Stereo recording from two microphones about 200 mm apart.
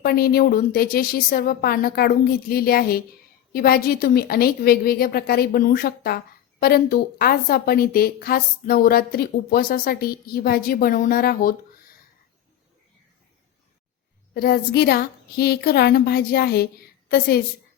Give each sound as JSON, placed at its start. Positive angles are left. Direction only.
{"t": 0.0, "sound": "a woman's voice", "side_deg": 50}
{"t": 14.3, "sound": "a woman's voice", "side_deg": 50}